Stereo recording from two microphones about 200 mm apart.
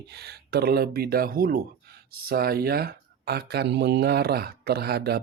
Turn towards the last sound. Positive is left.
turn(degrees=-55)  # may be behind; listen again after turning